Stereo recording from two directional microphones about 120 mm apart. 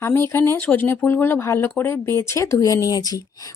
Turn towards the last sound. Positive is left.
turn(degrees=30)  # may be behind; listen again after turning